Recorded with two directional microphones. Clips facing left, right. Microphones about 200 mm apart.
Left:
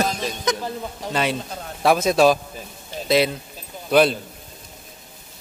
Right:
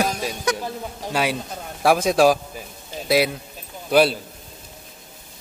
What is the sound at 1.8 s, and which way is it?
Speech, 10° right (ahead or behind).